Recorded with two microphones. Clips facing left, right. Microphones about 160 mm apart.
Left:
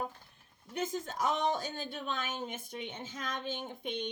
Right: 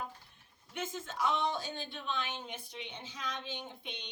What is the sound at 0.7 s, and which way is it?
Speech, 40° left (ahead or behind).